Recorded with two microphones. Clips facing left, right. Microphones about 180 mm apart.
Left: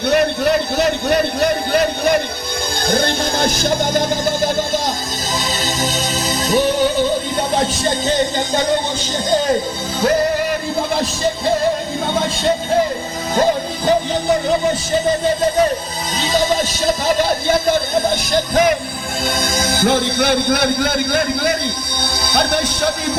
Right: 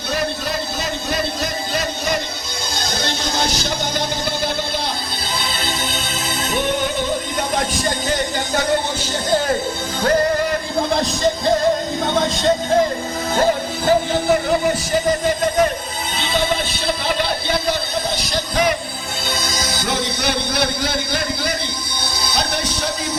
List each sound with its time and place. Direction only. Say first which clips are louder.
0.1 s a sound: left 8 dB; 65° left (ahead or behind)
2.8 s music: left 8 dB; 55° left (ahead or behind); by 8.6 s 25° left (ahead or behind)
16.2 s speech: left 4 dB; 40° left (ahead or behind)
22.3 s music: left 6 dB; 55° left (ahead or behind)